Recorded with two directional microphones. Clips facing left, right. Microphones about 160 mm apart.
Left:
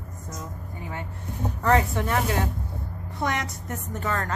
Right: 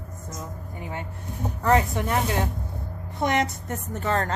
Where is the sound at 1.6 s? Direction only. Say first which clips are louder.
Right 1 dB; 15° right (ahead or behind).